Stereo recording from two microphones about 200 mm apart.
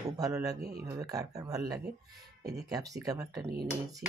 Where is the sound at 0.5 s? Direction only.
55° right (ahead or behind).